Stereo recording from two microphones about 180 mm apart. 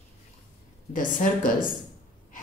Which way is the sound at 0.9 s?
50° left (ahead or behind).